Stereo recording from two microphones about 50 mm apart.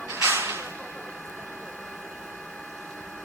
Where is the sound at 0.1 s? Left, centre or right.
Right.